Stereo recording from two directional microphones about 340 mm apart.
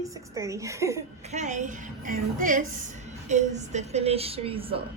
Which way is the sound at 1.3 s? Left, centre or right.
Right.